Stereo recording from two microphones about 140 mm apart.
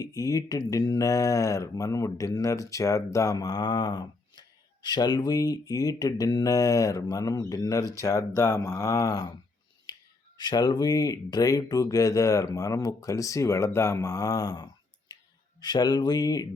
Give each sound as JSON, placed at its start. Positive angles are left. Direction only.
{"t": 0.0, "sound": "speech", "side_deg": 25}
{"t": 10.3, "sound": "speech", "side_deg": 30}